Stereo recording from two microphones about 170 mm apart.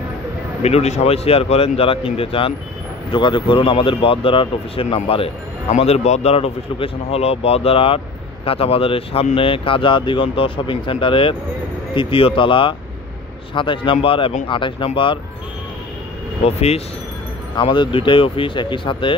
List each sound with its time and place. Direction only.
0.6 s speech: 40° left (ahead or behind)
16.4 s speech: 40° left (ahead or behind)